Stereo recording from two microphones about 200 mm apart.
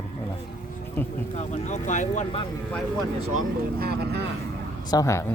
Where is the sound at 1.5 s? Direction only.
35° left (ahead or behind).